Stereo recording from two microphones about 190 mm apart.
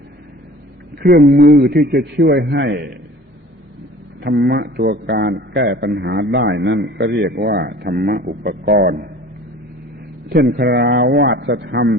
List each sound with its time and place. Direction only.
0.9 s a man's voice: 55° right (ahead or behind)
4.2 s a man's voice: 60° right (ahead or behind)
10.2 s a man's voice: 55° right (ahead or behind)